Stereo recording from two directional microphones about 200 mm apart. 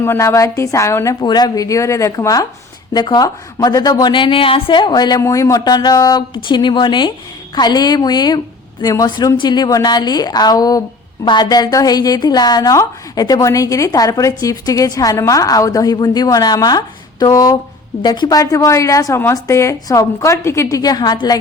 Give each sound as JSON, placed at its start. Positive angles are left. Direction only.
{"t": 0.0, "sound": "a woman's voice", "side_deg": 15}